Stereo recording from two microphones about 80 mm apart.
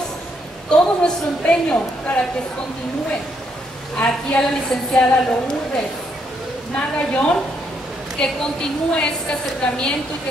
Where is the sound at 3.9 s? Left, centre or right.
Centre.